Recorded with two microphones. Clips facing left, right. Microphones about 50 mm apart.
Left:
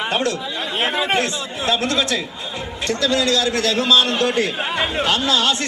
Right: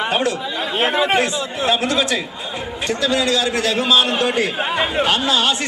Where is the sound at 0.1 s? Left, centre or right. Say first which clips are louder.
Even; centre.